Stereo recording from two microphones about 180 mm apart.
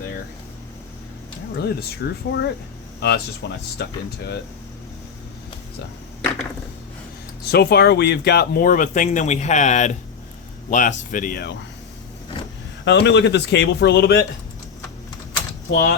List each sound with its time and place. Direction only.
1.5 s a man's voice: 65° left (ahead or behind)
7.4 s speech: 65° left (ahead or behind)
12.8 s a man's voice: 75° left (ahead or behind)